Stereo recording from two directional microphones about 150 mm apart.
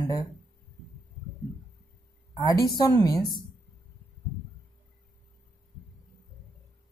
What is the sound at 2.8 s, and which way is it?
Speech, 25° left (ahead or behind).